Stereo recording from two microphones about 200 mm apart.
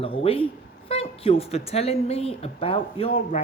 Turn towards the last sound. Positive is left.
turn(degrees=35)  # may be behind; listen again after turning